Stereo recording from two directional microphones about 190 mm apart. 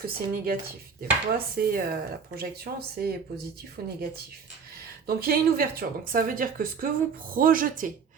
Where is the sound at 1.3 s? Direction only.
50° right (ahead or behind).